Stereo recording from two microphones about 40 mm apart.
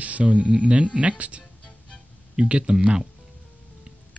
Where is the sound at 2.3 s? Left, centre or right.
Right.